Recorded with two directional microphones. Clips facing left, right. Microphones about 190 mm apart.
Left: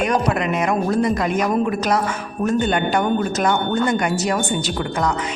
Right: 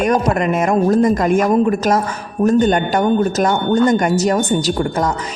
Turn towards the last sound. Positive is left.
turn(degrees=-40)  # may be behind; listen again after turning